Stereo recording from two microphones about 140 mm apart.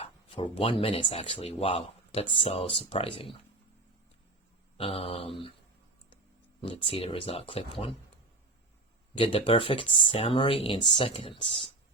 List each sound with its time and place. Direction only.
0.0 s speech: 40° left (ahead or behind)
4.8 s mantra: 45° left (ahead or behind)
6.6 s speech: 40° left (ahead or behind)
9.1 s speech: 40° left (ahead or behind)